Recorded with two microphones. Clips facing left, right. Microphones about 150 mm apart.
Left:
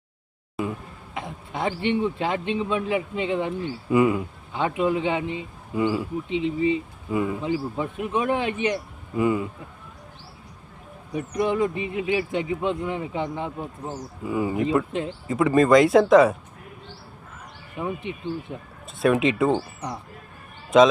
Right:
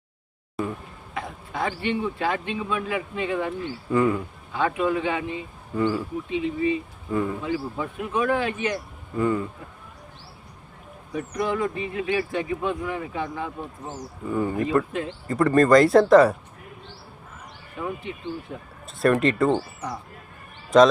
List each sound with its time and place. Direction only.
0.6 s a sound: centre (ahead or behind)
1.1 s speech: 20° left (ahead or behind)
11.1 s speech: 20° left (ahead or behind)
14.3 s speech: 10° left (ahead or behind)
17.7 s speech: 15° left (ahead or behind)
18.9 s speech: centre (ahead or behind)
20.7 s speech: centre (ahead or behind)